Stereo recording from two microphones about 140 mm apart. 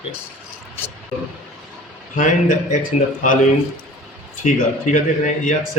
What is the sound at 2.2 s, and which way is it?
A man's voice, 70° left (ahead or behind).